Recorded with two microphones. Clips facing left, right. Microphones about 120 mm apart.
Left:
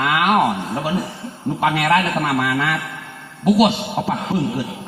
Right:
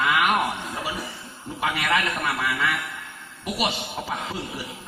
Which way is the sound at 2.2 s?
65° left (ahead or behind).